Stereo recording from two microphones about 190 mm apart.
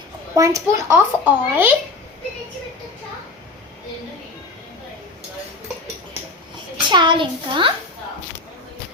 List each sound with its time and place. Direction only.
0.3 s a child's voice: 15° right (ahead or behind)
6.8 s a child's voice: 25° right (ahead or behind)